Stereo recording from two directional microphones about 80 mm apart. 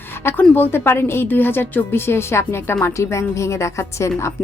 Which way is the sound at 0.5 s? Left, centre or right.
Left.